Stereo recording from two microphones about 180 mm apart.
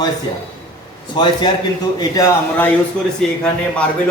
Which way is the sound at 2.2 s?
10° left (ahead or behind).